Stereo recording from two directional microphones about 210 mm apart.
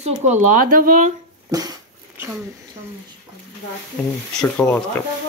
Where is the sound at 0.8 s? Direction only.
35° right (ahead or behind).